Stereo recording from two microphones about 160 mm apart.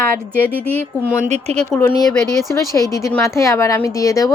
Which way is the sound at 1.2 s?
45° right (ahead or behind).